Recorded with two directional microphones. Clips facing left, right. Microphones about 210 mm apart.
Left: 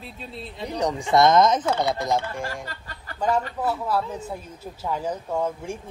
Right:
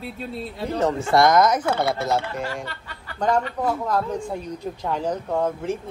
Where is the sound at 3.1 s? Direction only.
5° left (ahead or behind).